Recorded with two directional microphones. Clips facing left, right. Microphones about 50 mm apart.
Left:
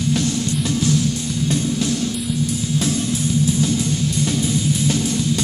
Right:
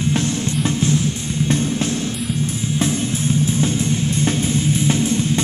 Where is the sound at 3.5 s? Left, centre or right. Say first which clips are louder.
Even; right.